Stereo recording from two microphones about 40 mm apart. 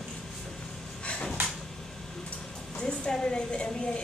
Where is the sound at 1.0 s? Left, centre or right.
Left.